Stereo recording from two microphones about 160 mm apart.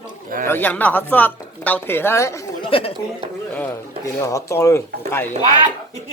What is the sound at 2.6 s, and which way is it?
Chatter, 35° left (ahead or behind).